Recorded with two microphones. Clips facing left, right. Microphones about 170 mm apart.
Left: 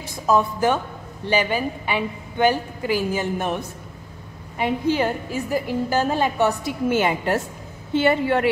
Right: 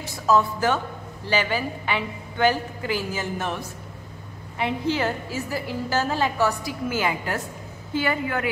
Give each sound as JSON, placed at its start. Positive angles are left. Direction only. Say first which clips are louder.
{"t": 0.0, "sound": "a woman's voice", "louder": "left 1 dB", "side_deg": 15}